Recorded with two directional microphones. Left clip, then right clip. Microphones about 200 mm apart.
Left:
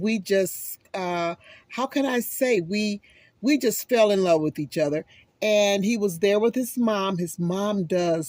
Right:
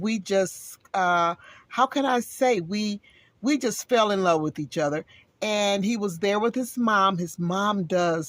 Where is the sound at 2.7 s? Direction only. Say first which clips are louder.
Left 3 dB; 50° right (ahead or behind).